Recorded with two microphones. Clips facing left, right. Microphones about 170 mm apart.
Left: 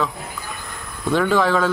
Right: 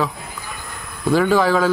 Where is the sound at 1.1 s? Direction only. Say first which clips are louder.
Right 2 dB; 5° right (ahead or behind).